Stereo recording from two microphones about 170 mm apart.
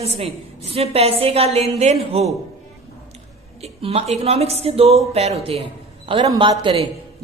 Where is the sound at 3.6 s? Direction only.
35° right (ahead or behind).